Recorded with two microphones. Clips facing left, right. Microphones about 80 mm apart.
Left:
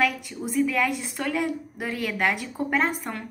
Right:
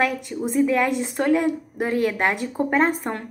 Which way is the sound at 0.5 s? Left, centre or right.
Right.